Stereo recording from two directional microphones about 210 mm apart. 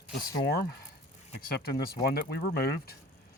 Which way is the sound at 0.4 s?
45° left (ahead or behind).